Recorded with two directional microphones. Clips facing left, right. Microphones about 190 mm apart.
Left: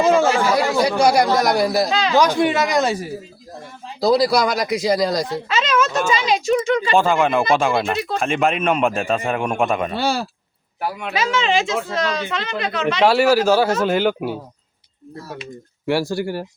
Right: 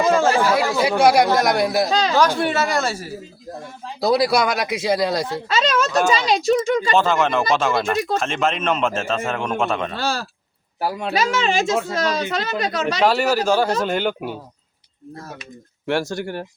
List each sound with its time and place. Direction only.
0.1 s a man's voice: 10° left (ahead or behind)
0.8 s speech: 5° right (ahead or behind)
1.9 s a woman's voice: 40° right (ahead or behind)
2.4 s a man's voice: 15° left (ahead or behind)
4.0 s speech: centre (ahead or behind)
5.5 s a woman's voice: 40° right (ahead or behind)
6.9 s a man's voice: 10° left (ahead or behind)
10.8 s a woman's voice: 35° right (ahead or behind)
13.1 s a man's voice: 10° left (ahead or behind)
15.9 s a man's voice: 5° left (ahead or behind)